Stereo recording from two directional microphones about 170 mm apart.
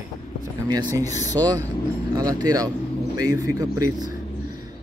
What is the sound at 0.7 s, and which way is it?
Speech, 25° right (ahead or behind).